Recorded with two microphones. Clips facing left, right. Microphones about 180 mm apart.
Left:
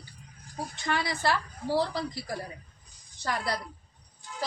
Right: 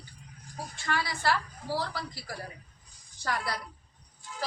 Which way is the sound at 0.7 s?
20° left (ahead or behind).